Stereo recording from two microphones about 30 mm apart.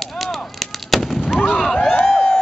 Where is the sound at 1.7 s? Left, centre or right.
Left.